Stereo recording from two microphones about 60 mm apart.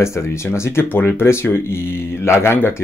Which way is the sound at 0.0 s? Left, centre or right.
Left.